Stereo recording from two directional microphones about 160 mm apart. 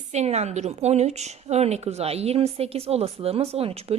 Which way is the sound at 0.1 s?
45° right (ahead or behind).